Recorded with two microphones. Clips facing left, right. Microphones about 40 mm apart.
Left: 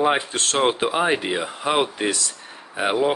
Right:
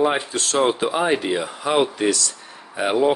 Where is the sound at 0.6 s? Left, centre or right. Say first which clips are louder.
Right 1 dB; left.